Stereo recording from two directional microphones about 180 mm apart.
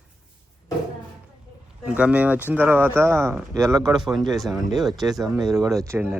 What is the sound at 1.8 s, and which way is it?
Speech, 5° right (ahead or behind).